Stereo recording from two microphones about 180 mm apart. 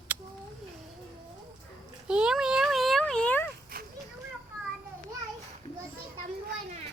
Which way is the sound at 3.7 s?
55° right (ahead or behind).